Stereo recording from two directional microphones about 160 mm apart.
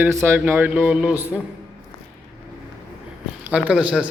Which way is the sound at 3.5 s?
5° right (ahead or behind).